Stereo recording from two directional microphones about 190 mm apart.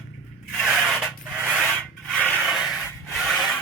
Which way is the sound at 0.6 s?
Centre (ahead or behind).